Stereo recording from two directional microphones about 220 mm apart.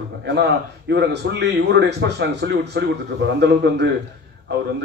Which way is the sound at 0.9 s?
50° right (ahead or behind).